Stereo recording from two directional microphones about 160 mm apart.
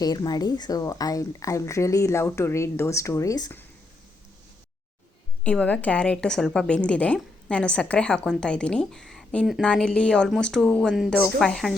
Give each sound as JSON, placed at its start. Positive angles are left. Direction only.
{"t": 0.0, "sound": "speech", "side_deg": 25}
{"t": 5.4, "sound": "a woman's voice", "side_deg": 5}